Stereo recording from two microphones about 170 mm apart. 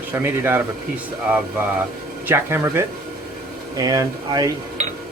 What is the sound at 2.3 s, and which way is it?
Speech, 15° right (ahead or behind).